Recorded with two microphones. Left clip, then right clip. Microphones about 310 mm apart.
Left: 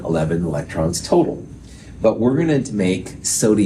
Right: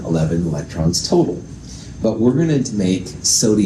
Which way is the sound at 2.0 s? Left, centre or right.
Left.